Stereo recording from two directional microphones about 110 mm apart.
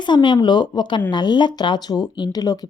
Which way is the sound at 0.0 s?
45° left (ahead or behind).